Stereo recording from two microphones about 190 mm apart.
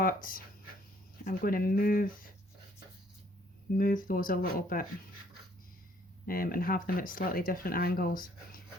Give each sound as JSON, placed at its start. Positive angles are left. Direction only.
{"t": 0.0, "sound": "speech", "side_deg": 45}
{"t": 3.8, "sound": "speech", "side_deg": 45}
{"t": 6.2, "sound": "speech", "side_deg": 50}